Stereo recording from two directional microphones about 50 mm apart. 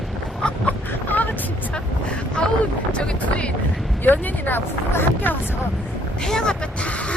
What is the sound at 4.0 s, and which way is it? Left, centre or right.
Speech, left.